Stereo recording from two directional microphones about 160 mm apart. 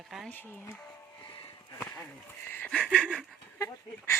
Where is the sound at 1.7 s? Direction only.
15° left (ahead or behind).